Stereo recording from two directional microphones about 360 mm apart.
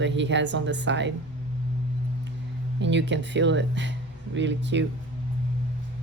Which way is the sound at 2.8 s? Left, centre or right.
Right.